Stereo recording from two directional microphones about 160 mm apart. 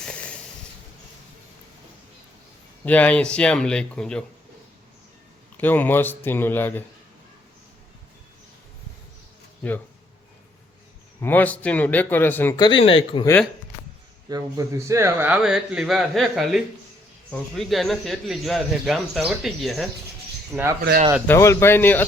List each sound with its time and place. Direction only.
0.0 s snort: 5° left (ahead or behind)
2.8 s speech: 10° left (ahead or behind)
5.5 s speech: 10° left (ahead or behind)
11.2 s speech: 10° left (ahead or behind)
12.5 s speech: 30° left (ahead or behind)
14.3 s speech: 20° right (ahead or behind); by 20.7 s centre (ahead or behind)
21.2 s speech: 15° left (ahead or behind)